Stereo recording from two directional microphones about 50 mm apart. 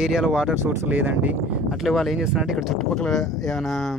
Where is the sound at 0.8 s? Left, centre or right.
Right.